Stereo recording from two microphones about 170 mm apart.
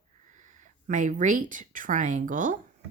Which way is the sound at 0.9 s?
45° right (ahead or behind).